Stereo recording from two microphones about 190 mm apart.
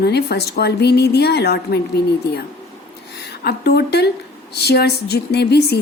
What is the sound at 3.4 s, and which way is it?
A woman's voice, 60° left (ahead or behind).